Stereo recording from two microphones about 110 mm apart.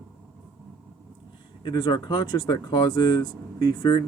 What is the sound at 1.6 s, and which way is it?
Speech, 45° left (ahead or behind).